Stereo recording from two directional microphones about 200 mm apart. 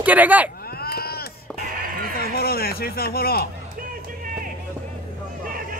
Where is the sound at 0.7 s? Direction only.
50° left (ahead or behind).